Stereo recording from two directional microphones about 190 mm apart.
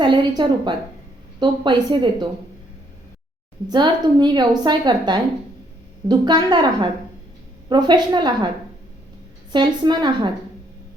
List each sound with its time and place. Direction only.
0.0 s a woman's voice: 25° right (ahead or behind)
3.7 s a woman's voice: 25° right (ahead or behind)
9.5 s a woman's voice: 25° right (ahead or behind)